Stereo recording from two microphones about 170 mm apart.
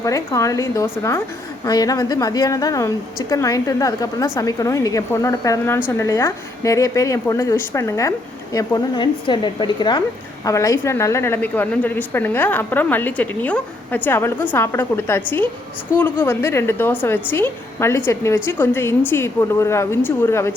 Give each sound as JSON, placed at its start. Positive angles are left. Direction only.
{"t": 0.3, "sound": "a woman's voice", "side_deg": 20}